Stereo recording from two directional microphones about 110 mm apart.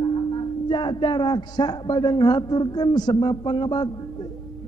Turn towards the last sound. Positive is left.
turn(degrees=40)  # may be behind; listen again after turning